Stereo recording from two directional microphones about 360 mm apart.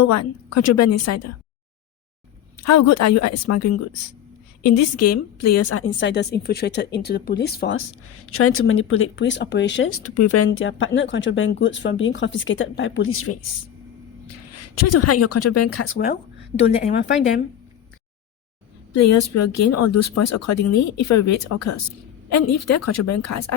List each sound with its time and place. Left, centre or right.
0.0 s speech: left
2.6 s speech: left
6.0 s speech: left
8.3 s speech: left
14.5 s speech: left
15.9 s speech: left
18.9 s speech: left